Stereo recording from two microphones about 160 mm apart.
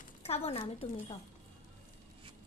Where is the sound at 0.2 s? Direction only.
40° left (ahead or behind).